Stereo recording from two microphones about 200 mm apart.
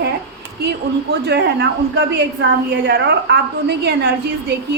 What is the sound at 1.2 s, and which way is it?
A woman's voice, 55° right (ahead or behind).